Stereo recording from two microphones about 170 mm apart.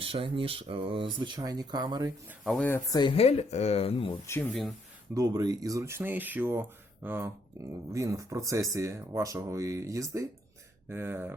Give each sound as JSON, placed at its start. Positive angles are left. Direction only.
{"t": 0.0, "sound": "speech", "side_deg": -30}
{"t": 2.4, "sound": "speech", "side_deg": 5}
{"t": 2.9, "sound": "speech", "side_deg": 30}
{"t": 5.1, "sound": "speech", "side_deg": -20}